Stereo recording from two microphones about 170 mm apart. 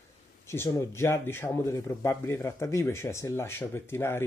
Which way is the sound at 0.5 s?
15° left (ahead or behind).